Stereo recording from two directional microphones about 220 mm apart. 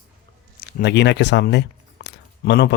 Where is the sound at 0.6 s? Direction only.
45° left (ahead or behind).